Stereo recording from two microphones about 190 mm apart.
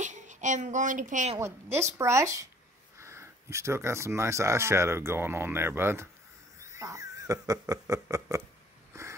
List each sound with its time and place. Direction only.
0.0 s a child's voice: 40° right (ahead or behind)
1.4 s speech: 15° right (ahead or behind)
6.6 s a sound: 15° right (ahead or behind)
7.6 s speech: 20° right (ahead or behind)